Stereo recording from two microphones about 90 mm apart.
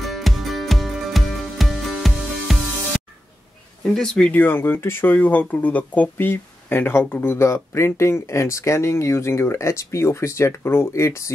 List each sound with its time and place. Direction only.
0.0 s music: centre (ahead or behind)
3.8 s speech: 5° left (ahead or behind)
4.3 s speech: 20° left (ahead or behind)